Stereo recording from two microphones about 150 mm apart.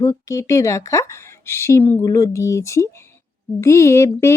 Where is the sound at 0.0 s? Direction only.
20° left (ahead or behind).